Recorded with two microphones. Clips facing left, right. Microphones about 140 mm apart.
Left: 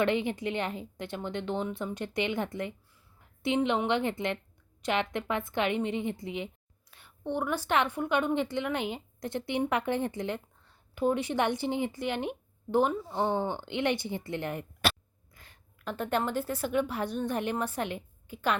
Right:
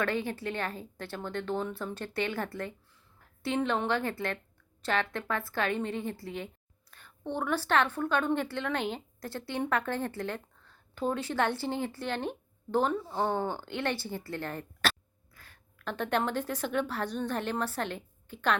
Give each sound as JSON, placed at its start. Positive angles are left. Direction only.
{"t": 0.0, "sound": "a woman's voice", "side_deg": 20}